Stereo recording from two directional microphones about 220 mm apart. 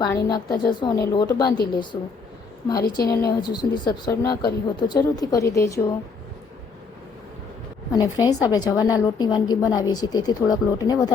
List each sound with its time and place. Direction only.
0.3 s speech: 20° left (ahead or behind)
3.0 s a woman's voice: 45° left (ahead or behind)
3.2 s a woman's voice: 20° left (ahead or behind)
7.9 s a woman's voice: 15° left (ahead or behind)